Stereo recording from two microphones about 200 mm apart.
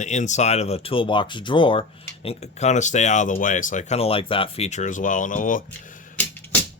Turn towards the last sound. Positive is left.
turn(degrees=10)  # may be behind; listen again after turning